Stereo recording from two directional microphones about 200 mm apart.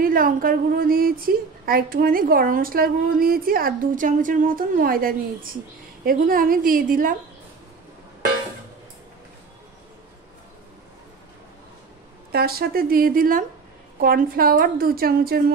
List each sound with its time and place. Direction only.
0.0 s a woman's voice: 45° right (ahead or behind)
12.3 s a woman's voice: 50° right (ahead or behind)